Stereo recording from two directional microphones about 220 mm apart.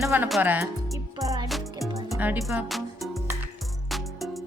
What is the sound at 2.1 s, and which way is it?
Music, 5° right (ahead or behind).